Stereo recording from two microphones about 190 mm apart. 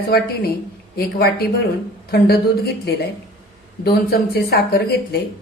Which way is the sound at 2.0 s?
55° left (ahead or behind).